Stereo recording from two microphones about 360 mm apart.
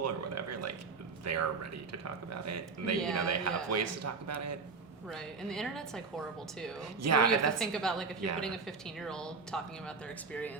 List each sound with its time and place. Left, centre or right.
0.0 s a sound: right
1.2 s a man's voice: right
5.0 s a woman's voice: centre
7.0 s a man's voice: right
7.3 s a woman's voice: centre